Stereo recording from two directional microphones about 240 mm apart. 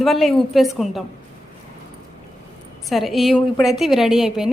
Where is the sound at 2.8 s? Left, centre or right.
Centre.